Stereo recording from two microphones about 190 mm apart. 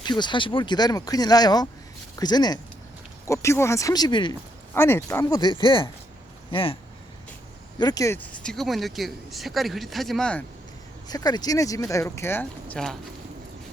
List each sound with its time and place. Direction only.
0.0 s speech: 25° left (ahead or behind)
4.7 s speech: 10° left (ahead or behind); by 6.7 s 30° left (ahead or behind)
7.8 s speech: 20° left (ahead or behind)
8.4 s speech: centre (ahead or behind)
11.1 s speech: 20° left (ahead or behind); by 13.0 s 5° left (ahead or behind)